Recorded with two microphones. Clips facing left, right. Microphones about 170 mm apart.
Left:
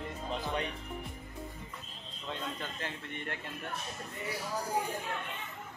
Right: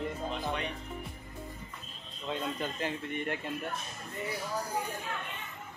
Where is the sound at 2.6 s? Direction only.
15° right (ahead or behind).